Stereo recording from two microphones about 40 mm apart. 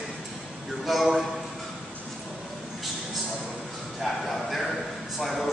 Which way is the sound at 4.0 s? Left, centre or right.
Centre.